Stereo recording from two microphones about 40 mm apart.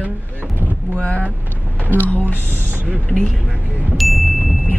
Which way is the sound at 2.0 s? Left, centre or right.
Left.